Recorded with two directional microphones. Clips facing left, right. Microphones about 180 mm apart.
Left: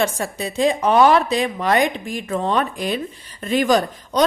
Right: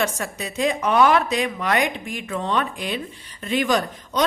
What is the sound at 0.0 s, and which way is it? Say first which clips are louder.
A woman's voice: left 3 dB; 30° left (ahead or behind).